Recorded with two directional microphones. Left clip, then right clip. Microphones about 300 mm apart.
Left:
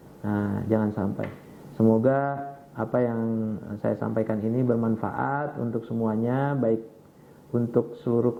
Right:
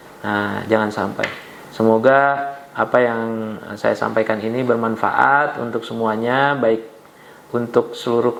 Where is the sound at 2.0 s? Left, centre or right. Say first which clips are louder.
Right 11 dB; centre.